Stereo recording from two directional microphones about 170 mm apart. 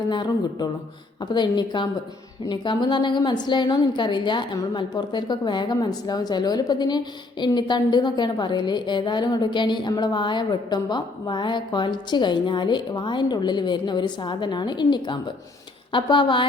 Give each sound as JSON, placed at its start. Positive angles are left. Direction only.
{"t": 0.1, "sound": "a woman's voice", "side_deg": 25}